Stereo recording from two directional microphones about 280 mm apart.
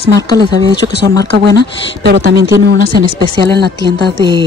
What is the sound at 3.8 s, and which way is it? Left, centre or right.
Music, left.